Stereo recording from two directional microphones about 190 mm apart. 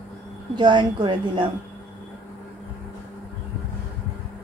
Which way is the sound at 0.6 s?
25° right (ahead or behind).